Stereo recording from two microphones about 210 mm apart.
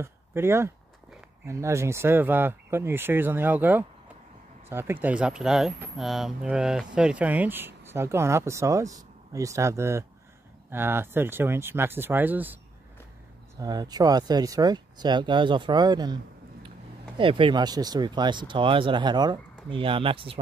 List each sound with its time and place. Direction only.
0.0 s speech: 10° right (ahead or behind)
13.6 s speech: 20° right (ahead or behind)
17.2 s speech: 25° right (ahead or behind)